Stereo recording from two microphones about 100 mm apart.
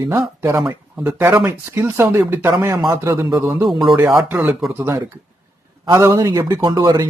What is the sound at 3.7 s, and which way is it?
Speech, centre (ahead or behind).